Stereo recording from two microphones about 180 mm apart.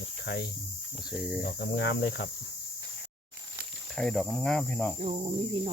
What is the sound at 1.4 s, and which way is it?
Cricket, 60° left (ahead or behind).